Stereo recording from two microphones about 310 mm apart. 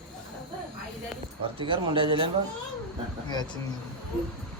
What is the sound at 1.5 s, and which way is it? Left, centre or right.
Speech, centre.